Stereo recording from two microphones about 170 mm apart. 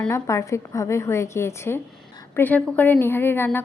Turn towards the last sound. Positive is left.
turn(degrees=10)  # may be behind; listen again after turning